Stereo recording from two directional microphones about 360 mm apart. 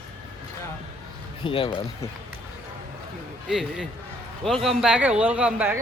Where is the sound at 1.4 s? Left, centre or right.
Centre.